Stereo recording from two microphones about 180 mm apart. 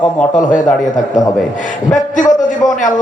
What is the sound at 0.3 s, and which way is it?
Speech, 45° left (ahead or behind).